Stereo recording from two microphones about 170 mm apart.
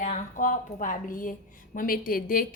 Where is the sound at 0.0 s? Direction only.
50° left (ahead or behind).